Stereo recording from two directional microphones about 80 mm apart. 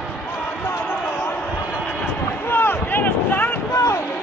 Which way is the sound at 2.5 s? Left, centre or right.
Left.